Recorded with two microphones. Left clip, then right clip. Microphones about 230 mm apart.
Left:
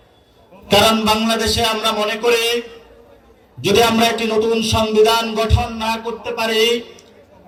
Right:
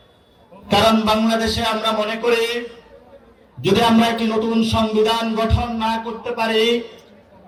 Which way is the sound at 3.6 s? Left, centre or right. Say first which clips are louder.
Left 2 dB; left.